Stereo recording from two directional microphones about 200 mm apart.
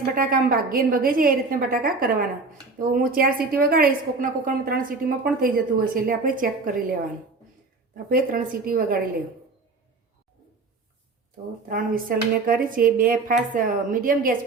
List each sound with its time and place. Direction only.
0.0 s a woman's voice: 45° right (ahead or behind)
8.1 s a woman's voice: 45° right (ahead or behind)
11.7 s a woman's voice: 45° right (ahead or behind)